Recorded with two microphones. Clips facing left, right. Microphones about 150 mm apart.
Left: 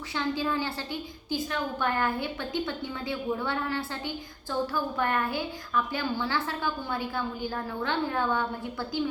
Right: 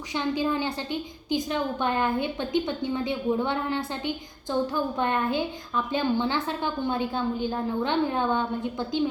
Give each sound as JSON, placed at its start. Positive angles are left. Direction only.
{"t": 0.1, "sound": "a woman's voice", "side_deg": -15}